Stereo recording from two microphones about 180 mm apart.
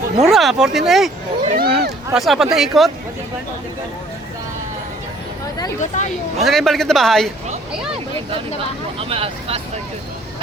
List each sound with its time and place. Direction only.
0.2 s speech: centre (ahead or behind)
1.5 s a sound: 55° right (ahead or behind)
2.1 s speech: centre (ahead or behind)
5.9 s speech: 45° left (ahead or behind)
6.4 s speech: centre (ahead or behind)
9.0 s speech: 30° right (ahead or behind)